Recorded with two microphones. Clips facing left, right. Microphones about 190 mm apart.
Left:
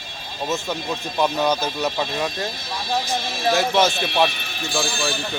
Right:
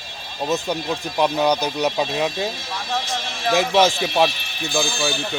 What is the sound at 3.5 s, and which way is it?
Speech, 15° right (ahead or behind).